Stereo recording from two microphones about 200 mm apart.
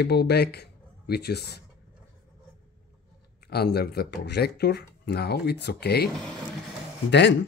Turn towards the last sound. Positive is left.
turn(degrees=60)  # may be behind; listen again after turning